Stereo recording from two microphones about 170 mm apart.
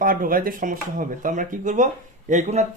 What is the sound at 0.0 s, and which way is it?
Speech, 55° right (ahead or behind).